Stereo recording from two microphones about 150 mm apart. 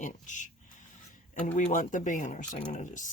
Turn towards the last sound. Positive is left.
turn(degrees=55)  # may be behind; listen again after turning